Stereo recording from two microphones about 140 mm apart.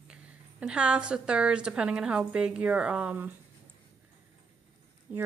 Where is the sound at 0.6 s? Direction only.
5° right (ahead or behind).